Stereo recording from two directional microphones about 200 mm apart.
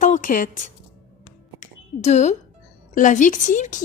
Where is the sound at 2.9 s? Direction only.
40° left (ahead or behind).